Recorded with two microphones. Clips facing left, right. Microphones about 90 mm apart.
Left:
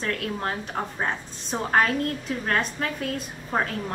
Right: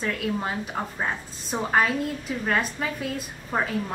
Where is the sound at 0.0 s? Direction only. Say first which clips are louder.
Right 1 dB; 5° right (ahead or behind).